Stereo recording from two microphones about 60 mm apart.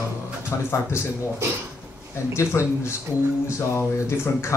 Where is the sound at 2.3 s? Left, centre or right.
Left.